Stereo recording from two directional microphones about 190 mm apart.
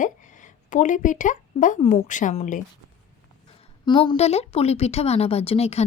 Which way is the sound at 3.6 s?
25° left (ahead or behind).